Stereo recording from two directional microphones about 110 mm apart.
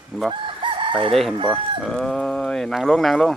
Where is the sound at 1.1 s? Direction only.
Centre (ahead or behind).